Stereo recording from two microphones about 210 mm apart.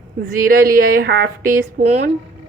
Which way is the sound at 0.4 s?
45° right (ahead or behind).